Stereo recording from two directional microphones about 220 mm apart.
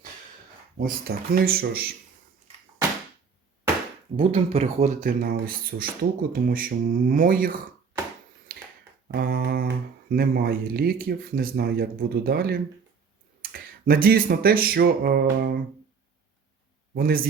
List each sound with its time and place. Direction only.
0.8 s speech: 40° right (ahead or behind)
4.2 s speech: 25° right (ahead or behind)
4.8 s speech: 40° right (ahead or behind)
9.1 s speech: 45° right (ahead or behind)
16.9 s speech: 40° right (ahead or behind)